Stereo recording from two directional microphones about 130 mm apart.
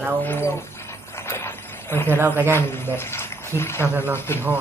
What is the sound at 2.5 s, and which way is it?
Speech, 15° left (ahead or behind).